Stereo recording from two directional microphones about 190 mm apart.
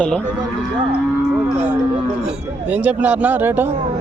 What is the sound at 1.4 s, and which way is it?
A man's voice, 5° right (ahead or behind).